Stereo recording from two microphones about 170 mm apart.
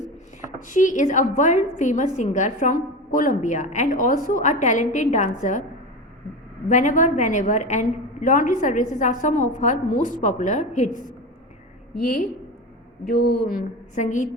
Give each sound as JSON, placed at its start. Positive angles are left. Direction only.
{"t": 0.7, "sound": "a woman's voice", "side_deg": 50}
{"t": 6.7, "sound": "a woman's voice", "side_deg": 50}
{"t": 13.1, "sound": "speech", "side_deg": 65}